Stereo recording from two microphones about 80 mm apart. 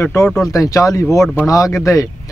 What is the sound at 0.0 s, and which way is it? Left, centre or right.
Speech, left.